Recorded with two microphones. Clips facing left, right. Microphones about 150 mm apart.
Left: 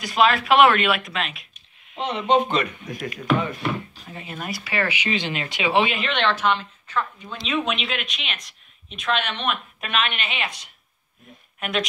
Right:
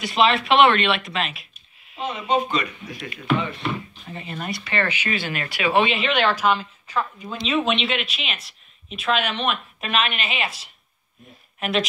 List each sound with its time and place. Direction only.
0.0 s speech: centre (ahead or behind)
2.0 s speech: 70° left (ahead or behind); by 3.1 s 50° left (ahead or behind)
4.1 s speech: centre (ahead or behind)
5.9 s speech: 5° right (ahead or behind)